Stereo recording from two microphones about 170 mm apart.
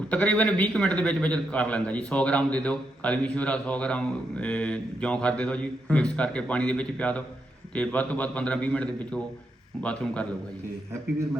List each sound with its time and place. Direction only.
0.1 s a man's voice: 5° left (ahead or behind)